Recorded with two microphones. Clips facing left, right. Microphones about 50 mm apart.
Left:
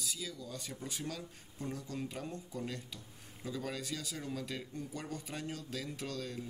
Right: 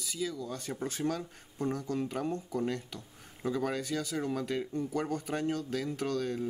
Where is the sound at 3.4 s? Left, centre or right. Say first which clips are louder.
Right 8 dB; right.